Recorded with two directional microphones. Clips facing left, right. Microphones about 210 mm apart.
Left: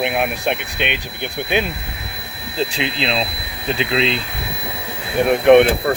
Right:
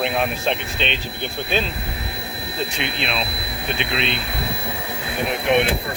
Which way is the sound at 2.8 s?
90° left.